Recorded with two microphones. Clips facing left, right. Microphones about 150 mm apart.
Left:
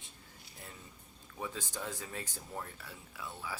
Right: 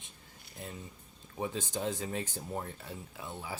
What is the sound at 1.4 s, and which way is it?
Speech, 25° right (ahead or behind).